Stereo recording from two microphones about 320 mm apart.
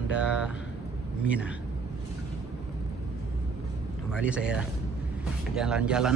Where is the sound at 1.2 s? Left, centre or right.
Centre.